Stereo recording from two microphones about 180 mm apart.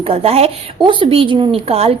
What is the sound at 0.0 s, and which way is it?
A woman's voice, 35° right (ahead or behind).